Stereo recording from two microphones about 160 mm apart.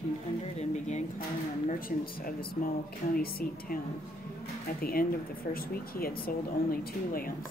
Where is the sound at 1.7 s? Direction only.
65° left (ahead or behind).